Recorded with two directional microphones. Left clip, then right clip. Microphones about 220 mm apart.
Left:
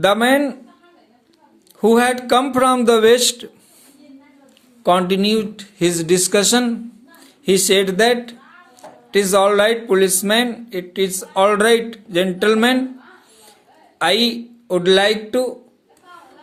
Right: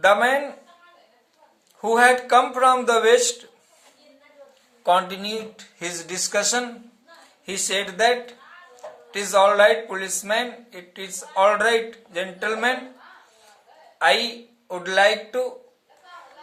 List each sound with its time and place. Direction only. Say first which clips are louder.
0.0 s speech: left 3 dB; 45° left (ahead or behind)
1.8 s speech: left 2 dB; 45° left (ahead or behind)
4.8 s a man's voice: left 5 dB; 35° left (ahead or behind)
14.0 s speech: left 3 dB; 45° left (ahead or behind)